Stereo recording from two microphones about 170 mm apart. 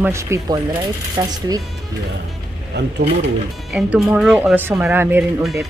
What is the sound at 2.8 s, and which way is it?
Speech, 80° right.